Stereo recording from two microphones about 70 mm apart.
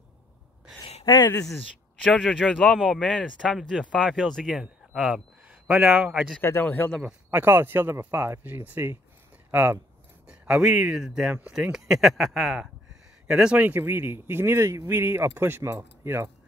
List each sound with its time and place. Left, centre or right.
0.7 s a sound: left
1.2 s speech: left
2.0 s speech: centre
2.6 s speech: centre
4.5 s a sound: centre
5.9 s a man's voice: right
6.4 s a man's voice: left
7.2 s a man's voice: right
10.2 s speech: centre
13.7 s speech: right